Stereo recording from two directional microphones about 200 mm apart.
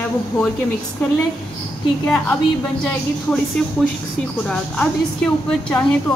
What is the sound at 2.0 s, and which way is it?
Speech, 10° left (ahead or behind).